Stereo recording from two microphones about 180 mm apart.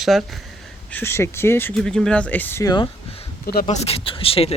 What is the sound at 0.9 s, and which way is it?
Speech, 15° left (ahead or behind).